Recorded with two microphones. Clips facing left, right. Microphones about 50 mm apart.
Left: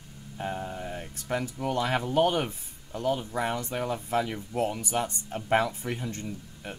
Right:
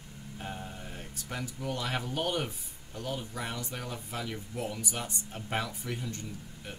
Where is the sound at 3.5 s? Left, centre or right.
Left.